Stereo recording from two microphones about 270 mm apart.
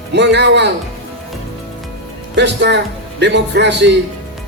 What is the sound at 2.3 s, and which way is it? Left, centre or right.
Speech, right.